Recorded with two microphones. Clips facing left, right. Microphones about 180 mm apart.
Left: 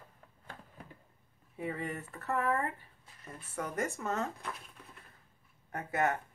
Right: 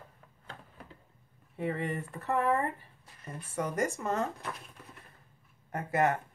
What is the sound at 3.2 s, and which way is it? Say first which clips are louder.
Speech: right 5 dB; 10° right (ahead or behind).